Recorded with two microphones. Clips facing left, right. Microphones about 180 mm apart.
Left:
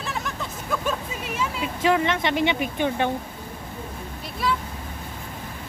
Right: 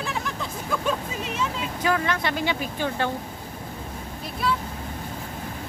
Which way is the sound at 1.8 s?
25° left (ahead or behind).